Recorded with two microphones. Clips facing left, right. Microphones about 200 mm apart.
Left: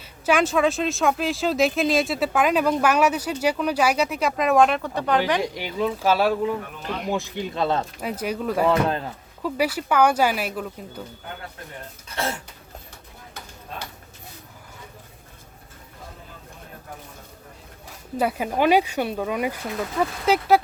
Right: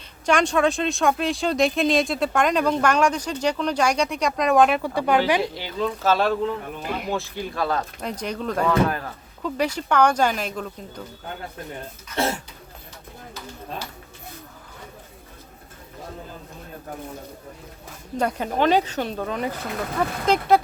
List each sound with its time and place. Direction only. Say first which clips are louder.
0.3 s speech: even; 5° left (ahead or behind)
5.4 s speech: left 1 dB; 15° left (ahead or behind)
6.8 s speech: right 2 dB; 5° right (ahead or behind)
7.1 s speech: left 1 dB; 15° left (ahead or behind)
8.0 s speech: left 2 dB; 5° left (ahead or behind)
8.6 s speech: even; 25° left (ahead or behind)
9.4 s speech: left 1 dB; 10° left (ahead or behind)
18.2 s speech: even; 5° left (ahead or behind)